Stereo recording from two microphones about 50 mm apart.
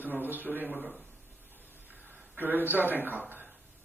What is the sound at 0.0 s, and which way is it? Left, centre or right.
Speech, right.